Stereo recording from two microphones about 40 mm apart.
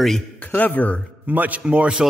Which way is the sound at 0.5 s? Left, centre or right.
Left.